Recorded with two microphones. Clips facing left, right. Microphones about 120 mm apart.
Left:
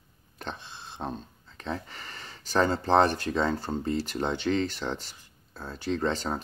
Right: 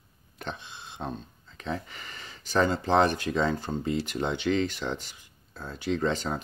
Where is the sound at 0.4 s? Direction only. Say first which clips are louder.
Right 1 dB; 35° left (ahead or behind).